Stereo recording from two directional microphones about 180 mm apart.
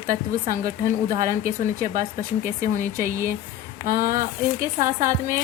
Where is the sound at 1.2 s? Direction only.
45° right (ahead or behind).